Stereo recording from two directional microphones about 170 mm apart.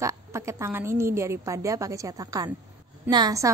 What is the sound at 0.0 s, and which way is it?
A woman's voice, 15° right (ahead or behind).